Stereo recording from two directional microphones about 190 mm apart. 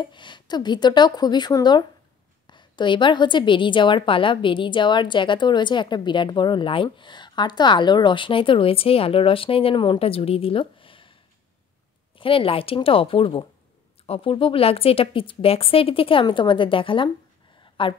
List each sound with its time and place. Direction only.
0.0 s a woman's voice: 25° left (ahead or behind)
12.2 s a woman's voice: 30° left (ahead or behind)